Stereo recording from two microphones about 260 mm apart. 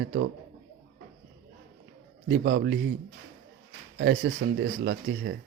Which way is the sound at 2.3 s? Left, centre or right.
Right.